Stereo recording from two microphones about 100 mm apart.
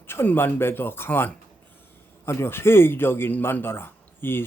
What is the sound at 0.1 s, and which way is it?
A man's voice, 25° left (ahead or behind).